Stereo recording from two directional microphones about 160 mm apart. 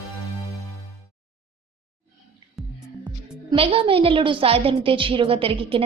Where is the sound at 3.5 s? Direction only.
35° right (ahead or behind).